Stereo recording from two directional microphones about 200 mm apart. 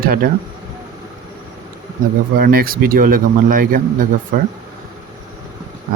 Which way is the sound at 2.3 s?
45° right (ahead or behind).